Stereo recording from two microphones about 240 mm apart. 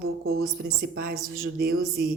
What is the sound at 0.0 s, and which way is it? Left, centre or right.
A woman's voice, right.